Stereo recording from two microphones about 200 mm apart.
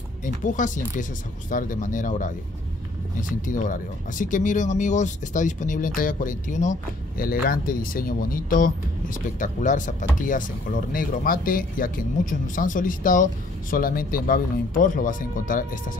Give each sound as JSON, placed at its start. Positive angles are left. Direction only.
{"t": 0.2, "sound": "speech", "side_deg": 40}